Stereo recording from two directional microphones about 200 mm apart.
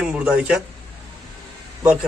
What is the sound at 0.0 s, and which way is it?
Speech, 5° right (ahead or behind).